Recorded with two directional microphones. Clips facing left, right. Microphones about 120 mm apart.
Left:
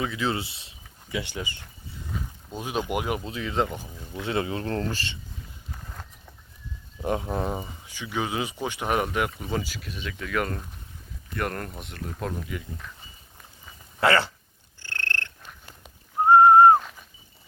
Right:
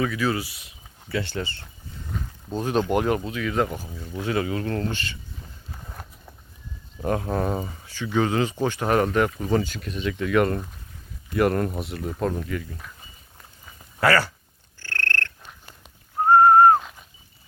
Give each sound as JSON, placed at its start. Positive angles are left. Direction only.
{"t": 0.0, "sound": "speech", "side_deg": 25}
{"t": 1.1, "sound": "speech", "side_deg": 15}
{"t": 3.2, "sound": "speech", "side_deg": 25}
{"t": 5.7, "sound": "walk", "side_deg": -10}
{"t": 7.0, "sound": "speech", "side_deg": 15}
{"t": 14.0, "sound": "speech", "side_deg": 25}
{"t": 14.8, "sound": "purr", "side_deg": 15}
{"t": 16.3, "sound": "whistling", "side_deg": 20}